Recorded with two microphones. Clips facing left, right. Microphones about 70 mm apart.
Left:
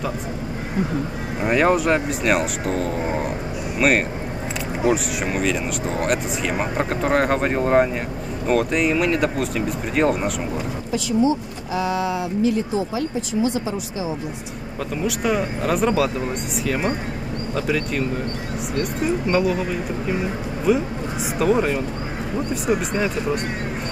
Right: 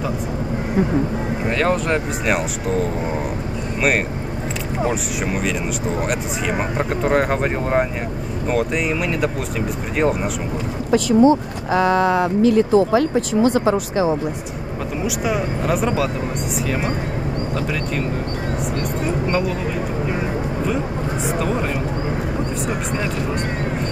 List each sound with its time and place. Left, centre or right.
1.5 s speech: centre
2.2 s speech: centre
4.8 s speech: centre
10.9 s speech: right
15.0 s speech: centre
21.4 s speech: centre